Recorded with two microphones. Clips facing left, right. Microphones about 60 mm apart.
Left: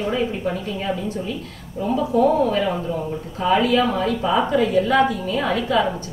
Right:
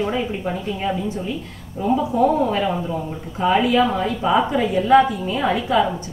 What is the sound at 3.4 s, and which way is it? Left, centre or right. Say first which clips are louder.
A woman's voice: right 1 dB; centre.